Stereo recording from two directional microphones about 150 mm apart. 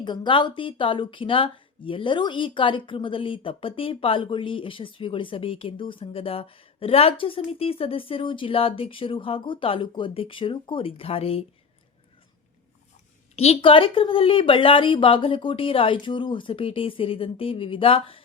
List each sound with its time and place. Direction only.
0.0 s speech: 30° left (ahead or behind)
13.3 s speech: 45° left (ahead or behind)